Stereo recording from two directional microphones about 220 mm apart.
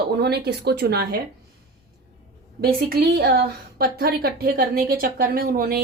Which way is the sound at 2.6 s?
45° right (ahead or behind).